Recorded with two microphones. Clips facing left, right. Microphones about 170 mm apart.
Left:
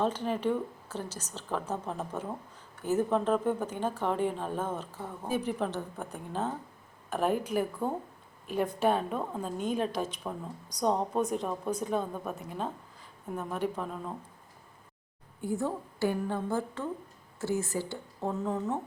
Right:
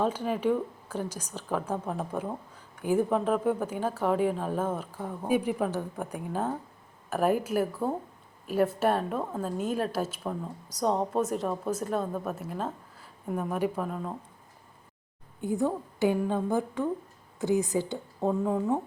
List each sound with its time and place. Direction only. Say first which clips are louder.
0.0 s a woman's voice: right 2 dB; 10° right (ahead or behind)
15.4 s speech: right 4 dB; 20° right (ahead or behind)